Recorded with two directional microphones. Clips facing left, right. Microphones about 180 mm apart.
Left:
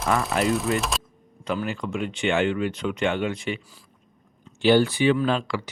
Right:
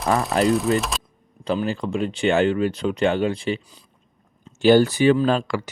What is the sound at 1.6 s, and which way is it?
Speech, 30° right (ahead or behind).